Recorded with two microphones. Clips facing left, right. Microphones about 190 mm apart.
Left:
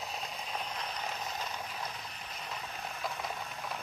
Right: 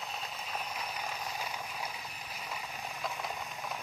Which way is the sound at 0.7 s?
10° right (ahead or behind).